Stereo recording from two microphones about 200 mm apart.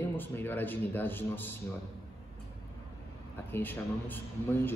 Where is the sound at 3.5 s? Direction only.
10° left (ahead or behind).